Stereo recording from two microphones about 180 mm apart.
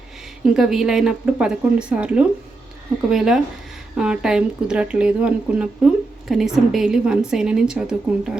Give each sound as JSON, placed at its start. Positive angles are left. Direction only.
{"t": 0.4, "sound": "speech", "side_deg": -5}